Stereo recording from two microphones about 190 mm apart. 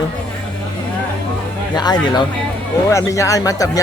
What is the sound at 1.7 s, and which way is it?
Speech, 20° left (ahead or behind).